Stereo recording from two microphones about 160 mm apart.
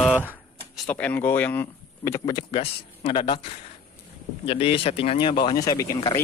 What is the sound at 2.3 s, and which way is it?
Speech, 30° left (ahead or behind).